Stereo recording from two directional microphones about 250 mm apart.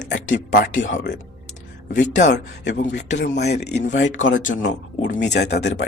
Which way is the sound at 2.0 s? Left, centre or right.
Left.